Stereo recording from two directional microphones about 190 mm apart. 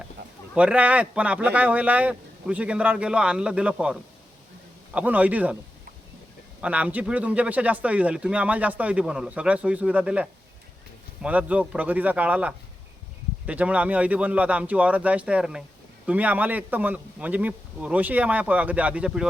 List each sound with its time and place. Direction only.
0.2 s a sound: 55° right (ahead or behind)
0.5 s a man's voice: 5° right (ahead or behind)
6.6 s a man's voice: 5° right (ahead or behind)